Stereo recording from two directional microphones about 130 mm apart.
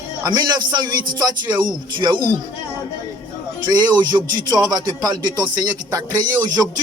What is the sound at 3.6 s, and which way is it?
Speech, 35° right (ahead or behind).